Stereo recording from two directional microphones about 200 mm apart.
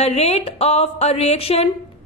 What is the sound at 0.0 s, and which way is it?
A woman's voice, 30° left (ahead or behind).